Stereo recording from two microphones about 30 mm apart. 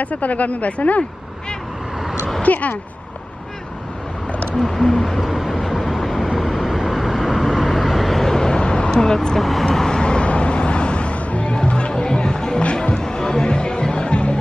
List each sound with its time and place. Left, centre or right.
0.0 s speech: left
2.4 s speech: left
4.6 s speech: centre
5.5 s train: centre
6.5 s vehicle: centre
8.2 s vehicle: centre
8.5 s vehicle: left
9.0 s speech: left
9.4 s speech: centre
9.8 s vehicle: left
10.2 s a sound: left
11.4 s music: left